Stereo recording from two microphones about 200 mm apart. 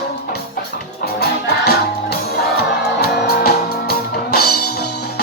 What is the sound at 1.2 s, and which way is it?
Music, 55° left (ahead or behind).